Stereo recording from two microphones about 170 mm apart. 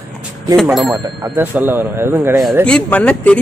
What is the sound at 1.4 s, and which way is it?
A man's voice, 10° right (ahead or behind).